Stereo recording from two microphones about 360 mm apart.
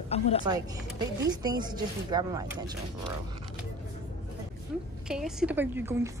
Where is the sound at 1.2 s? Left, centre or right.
Centre.